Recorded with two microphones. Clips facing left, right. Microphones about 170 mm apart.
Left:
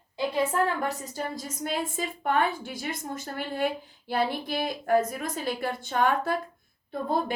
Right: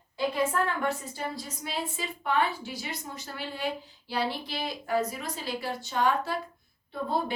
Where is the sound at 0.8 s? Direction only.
45° left (ahead or behind).